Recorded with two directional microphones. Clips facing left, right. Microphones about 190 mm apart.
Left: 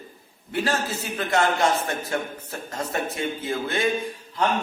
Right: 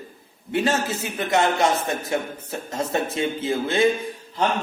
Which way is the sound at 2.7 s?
25° right (ahead or behind).